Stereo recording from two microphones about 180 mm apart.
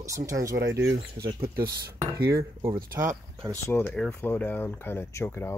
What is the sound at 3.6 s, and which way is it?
Speech, 10° left (ahead or behind).